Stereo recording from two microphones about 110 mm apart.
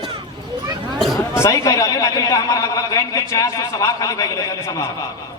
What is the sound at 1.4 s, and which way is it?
A man's voice, 30° left (ahead or behind).